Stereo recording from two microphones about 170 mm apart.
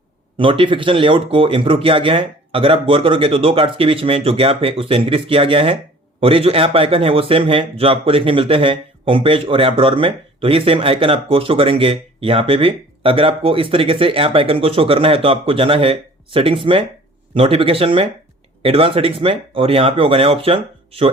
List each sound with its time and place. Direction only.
0.3 s speech: 30° right (ahead or behind)